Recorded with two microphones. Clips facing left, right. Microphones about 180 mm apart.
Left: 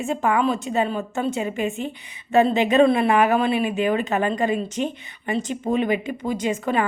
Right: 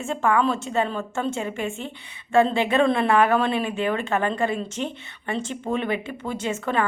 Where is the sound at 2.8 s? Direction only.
10° left (ahead or behind).